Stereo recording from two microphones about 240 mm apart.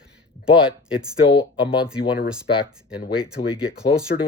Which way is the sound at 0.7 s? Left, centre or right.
Centre.